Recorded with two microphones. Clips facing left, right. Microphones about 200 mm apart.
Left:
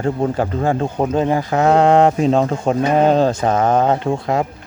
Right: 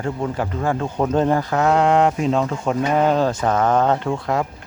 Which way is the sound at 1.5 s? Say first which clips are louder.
Left 5 dB; 30° left (ahead or behind).